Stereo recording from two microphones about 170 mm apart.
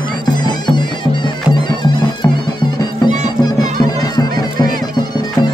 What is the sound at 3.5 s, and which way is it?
Bagpipes, 25° left (ahead or behind).